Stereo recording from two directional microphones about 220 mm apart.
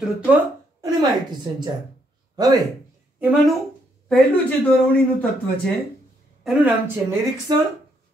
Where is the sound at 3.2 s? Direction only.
5° right (ahead or behind).